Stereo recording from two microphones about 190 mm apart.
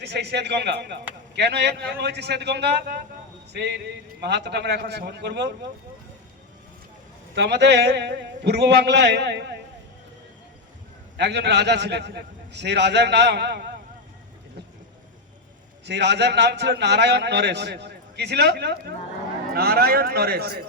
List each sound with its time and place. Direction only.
0.0 s a man's voice: 60° right (ahead or behind)
7.3 s a man's voice: 60° right (ahead or behind)
11.2 s a man's voice: 65° right (ahead or behind)
15.9 s a man's voice: 65° right (ahead or behind)